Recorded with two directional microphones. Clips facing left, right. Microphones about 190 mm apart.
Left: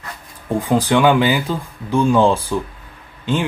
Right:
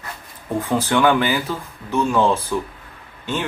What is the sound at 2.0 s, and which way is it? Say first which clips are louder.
Speech: left 4 dB; 25° left (ahead or behind).